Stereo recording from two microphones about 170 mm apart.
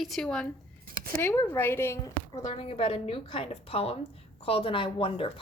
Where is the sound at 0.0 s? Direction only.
Centre (ahead or behind).